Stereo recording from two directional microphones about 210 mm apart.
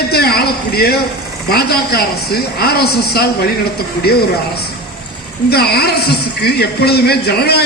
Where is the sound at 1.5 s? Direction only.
50° left (ahead or behind).